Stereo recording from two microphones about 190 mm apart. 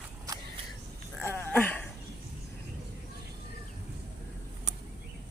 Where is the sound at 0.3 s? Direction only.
20° right (ahead or behind).